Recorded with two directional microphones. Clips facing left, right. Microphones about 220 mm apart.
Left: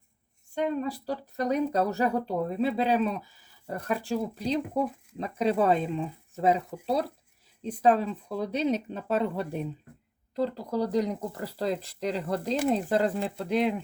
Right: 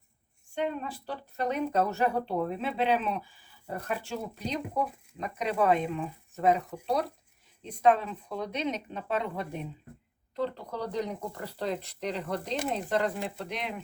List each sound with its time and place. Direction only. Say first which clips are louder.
0.5 s speech: left 4 dB; 40° left (ahead or behind)